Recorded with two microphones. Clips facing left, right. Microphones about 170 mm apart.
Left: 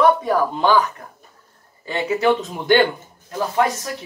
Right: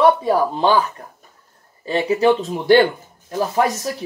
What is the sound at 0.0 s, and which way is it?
Speech, 30° right (ahead or behind).